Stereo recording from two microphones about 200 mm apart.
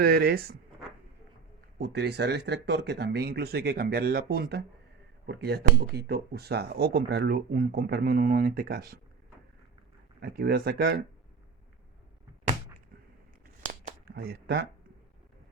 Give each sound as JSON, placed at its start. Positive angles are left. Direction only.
{"t": 0.0, "sound": "speech", "side_deg": -50}
{"t": 1.8, "sound": "speech", "side_deg": -55}
{"t": 10.2, "sound": "speech", "side_deg": -50}
{"t": 14.1, "sound": "speech", "side_deg": -50}